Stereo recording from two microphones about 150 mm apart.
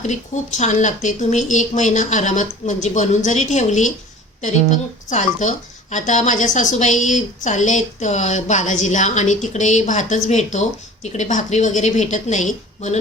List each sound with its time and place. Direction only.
0.0 s speech: 55° left (ahead or behind)
5.0 s speech: 55° left (ahead or behind)